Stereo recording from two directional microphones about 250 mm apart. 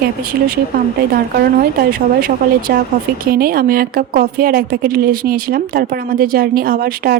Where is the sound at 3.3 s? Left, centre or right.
Right.